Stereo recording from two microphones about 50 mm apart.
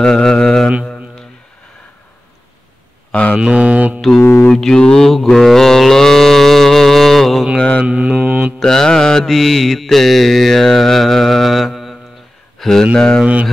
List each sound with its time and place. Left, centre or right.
0.0 s mantra: centre
3.3 s speech: right
4.2 s mantra: left
4.6 s mantra: centre
5.1 s livestock: centre
7.5 s mantra: centre
7.8 s mantra: right
8.5 s mantra: centre
9.2 s mantra: centre
12.5 s a sound: centre
12.9 s mantra: centre
13.2 s speech: right